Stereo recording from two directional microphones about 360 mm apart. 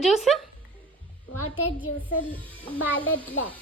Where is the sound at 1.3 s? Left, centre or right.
Left.